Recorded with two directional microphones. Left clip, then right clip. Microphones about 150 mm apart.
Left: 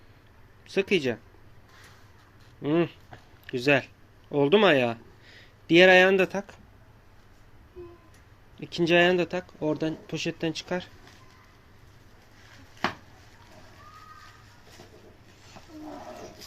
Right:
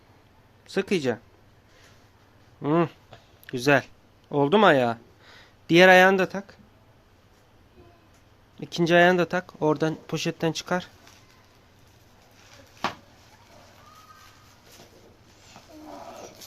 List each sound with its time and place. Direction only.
0.7 s speech: 40° right (ahead or behind)
2.6 s speech: 50° right (ahead or behind)
3.4 s a sound: 45° right (ahead or behind)
6.1 s speech: 35° right (ahead or behind)
8.6 s speech: 50° right (ahead or behind)